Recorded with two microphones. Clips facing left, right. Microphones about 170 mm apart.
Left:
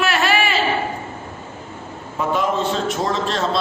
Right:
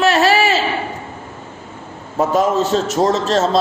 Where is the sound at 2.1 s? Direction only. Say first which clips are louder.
Right 5 dB; 40° right (ahead or behind).